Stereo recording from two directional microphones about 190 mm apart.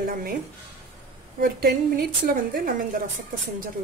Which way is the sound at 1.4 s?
50° right (ahead or behind).